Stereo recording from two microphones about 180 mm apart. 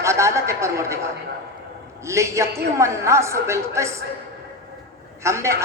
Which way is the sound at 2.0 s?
15° right (ahead or behind).